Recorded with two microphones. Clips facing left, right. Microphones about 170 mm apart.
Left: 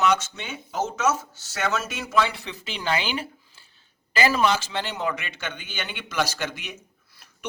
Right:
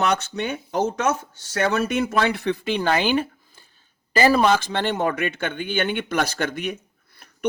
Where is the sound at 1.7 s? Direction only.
60° right (ahead or behind).